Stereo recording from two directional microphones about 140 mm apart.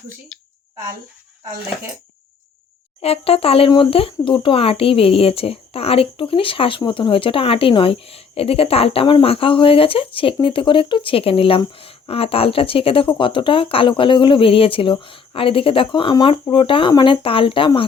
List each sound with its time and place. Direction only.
3.0 s a child's voice: 45° left (ahead or behind)